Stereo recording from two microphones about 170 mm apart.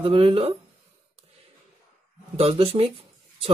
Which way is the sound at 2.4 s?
35° right (ahead or behind).